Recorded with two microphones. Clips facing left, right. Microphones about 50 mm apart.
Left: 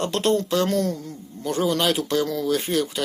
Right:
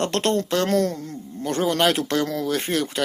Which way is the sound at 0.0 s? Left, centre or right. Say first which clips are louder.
Even; right.